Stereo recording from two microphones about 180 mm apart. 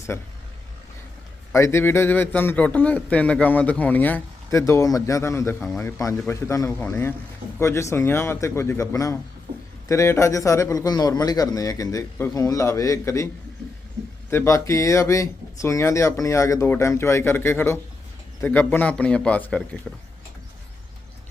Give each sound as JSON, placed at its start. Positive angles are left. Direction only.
{"t": 0.1, "sound": "a man's voice", "side_deg": 15}
{"t": 1.5, "sound": "a man's voice", "side_deg": 15}
{"t": 9.5, "sound": "a sound", "side_deg": -30}
{"t": 9.9, "sound": "a man's voice", "side_deg": 15}
{"t": 14.3, "sound": "a man's voice", "side_deg": 15}